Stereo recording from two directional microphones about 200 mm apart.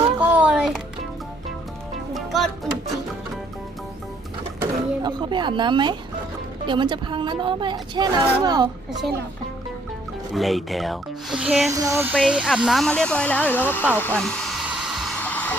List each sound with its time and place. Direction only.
0.3 s a sound: 5° right (ahead or behind)
2.1 s music: centre (ahead or behind)
4.6 s vehicle: 20° right (ahead or behind)
6.7 s a woman's voice: 25° right (ahead or behind)
8.9 s speech: centre (ahead or behind)
10.3 s speech: centre (ahead or behind)
11.7 s a sound: 15° right (ahead or behind)
12.1 s speech: centre (ahead or behind)
14.2 s hair dryer: 5° left (ahead or behind)